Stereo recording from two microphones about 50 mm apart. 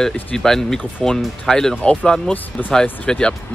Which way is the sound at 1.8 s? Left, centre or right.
Left.